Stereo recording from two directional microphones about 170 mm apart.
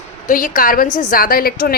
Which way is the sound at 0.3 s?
55° left (ahead or behind).